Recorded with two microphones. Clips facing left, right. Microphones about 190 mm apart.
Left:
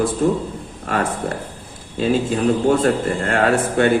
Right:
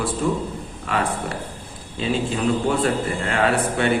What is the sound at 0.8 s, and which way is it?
Speech, 45° left (ahead or behind).